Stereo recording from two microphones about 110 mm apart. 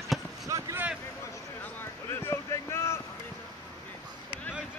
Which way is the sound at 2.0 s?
25° left (ahead or behind).